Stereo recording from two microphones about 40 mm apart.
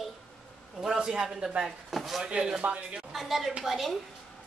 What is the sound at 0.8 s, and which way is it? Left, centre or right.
Speech, centre.